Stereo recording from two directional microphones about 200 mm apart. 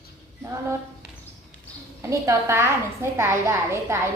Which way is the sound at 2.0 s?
15° right (ahead or behind).